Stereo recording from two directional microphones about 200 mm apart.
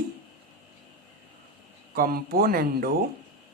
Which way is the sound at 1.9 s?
50° right (ahead or behind).